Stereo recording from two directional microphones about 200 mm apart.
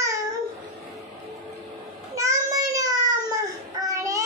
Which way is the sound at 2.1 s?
15° right (ahead or behind).